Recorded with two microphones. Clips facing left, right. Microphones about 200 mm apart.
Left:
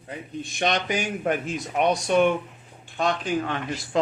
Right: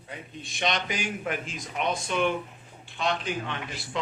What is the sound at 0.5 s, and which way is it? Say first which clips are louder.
Speech: left 4 dB; 45° left (ahead or behind).